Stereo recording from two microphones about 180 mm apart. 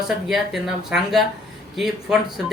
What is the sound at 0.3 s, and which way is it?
Speech, centre (ahead or behind).